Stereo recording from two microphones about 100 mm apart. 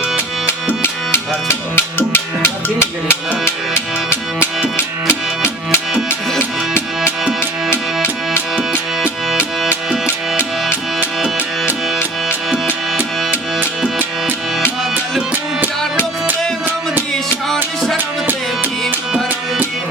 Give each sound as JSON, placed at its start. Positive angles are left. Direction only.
{"t": 0.4, "sound": "music", "side_deg": 25}
{"t": 7.0, "sound": "music", "side_deg": -10}
{"t": 12.6, "sound": "music", "side_deg": -15}
{"t": 17.9, "sound": "music", "side_deg": -20}